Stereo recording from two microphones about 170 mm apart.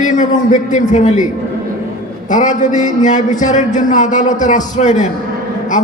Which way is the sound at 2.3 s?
50° left (ahead or behind).